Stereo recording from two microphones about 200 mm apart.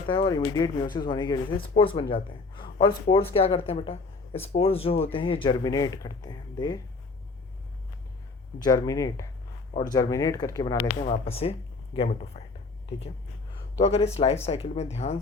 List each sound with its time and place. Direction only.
0.1 s speech: 20° left (ahead or behind)
8.5 s speech: 20° left (ahead or behind)
11.0 s speech: 30° left (ahead or behind)
13.7 s speech: 30° left (ahead or behind)